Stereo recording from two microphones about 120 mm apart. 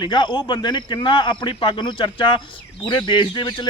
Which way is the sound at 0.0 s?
40° left (ahead or behind).